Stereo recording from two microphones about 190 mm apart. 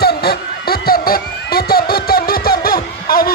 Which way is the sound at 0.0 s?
55° left (ahead or behind).